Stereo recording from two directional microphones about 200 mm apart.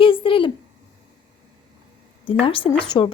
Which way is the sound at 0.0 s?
25° left (ahead or behind).